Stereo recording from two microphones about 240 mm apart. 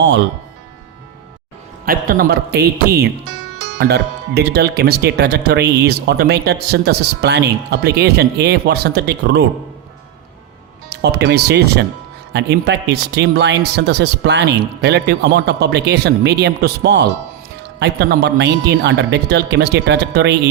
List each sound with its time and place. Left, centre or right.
1.8 s a man's voice: right
10.8 s speech: right